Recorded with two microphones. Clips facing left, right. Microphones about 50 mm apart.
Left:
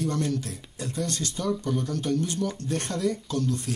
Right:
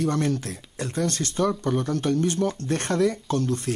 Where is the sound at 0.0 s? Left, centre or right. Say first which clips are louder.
Right 3 dB; right.